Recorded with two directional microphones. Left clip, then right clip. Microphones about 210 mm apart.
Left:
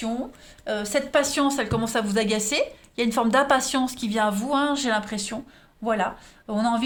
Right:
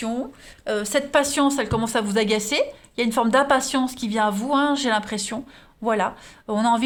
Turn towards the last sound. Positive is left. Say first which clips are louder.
# right 4 dB
turn(degrees=-30)  # may be behind; listen again after turning